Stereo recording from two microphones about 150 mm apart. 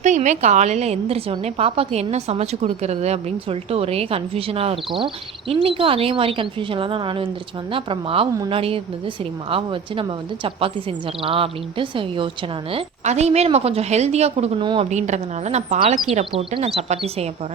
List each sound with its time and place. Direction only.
0.0 s a woman's voice: 50° right (ahead or behind); by 12.3 s 35° right (ahead or behind)
12.7 s a woman's voice: 45° right (ahead or behind)
14.8 s a woman's voice: 50° right (ahead or behind)